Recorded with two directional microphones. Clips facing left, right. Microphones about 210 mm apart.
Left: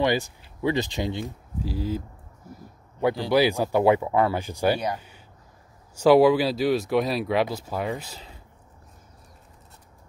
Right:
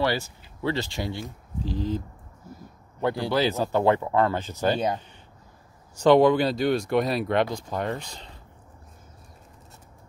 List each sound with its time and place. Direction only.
0.0 s speech: 15° left (ahead or behind)
1.6 s speech: 10° left (ahead or behind)
4.7 s speech: 25° right (ahead or behind)
5.9 s speech: 5° left (ahead or behind)